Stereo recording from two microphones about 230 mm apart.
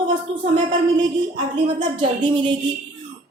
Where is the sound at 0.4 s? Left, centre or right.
Right.